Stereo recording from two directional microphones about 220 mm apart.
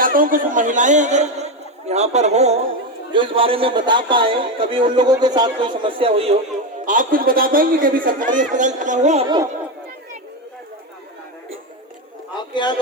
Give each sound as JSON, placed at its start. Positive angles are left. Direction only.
{"t": 0.0, "sound": "a man's voice", "side_deg": -40}
{"t": 6.8, "sound": "a man's voice", "side_deg": -35}
{"t": 9.2, "sound": "speech", "side_deg": -15}
{"t": 12.4, "sound": "a sound", "side_deg": 20}